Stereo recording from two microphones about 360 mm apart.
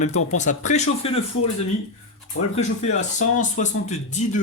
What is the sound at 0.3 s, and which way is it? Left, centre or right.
Speech, centre.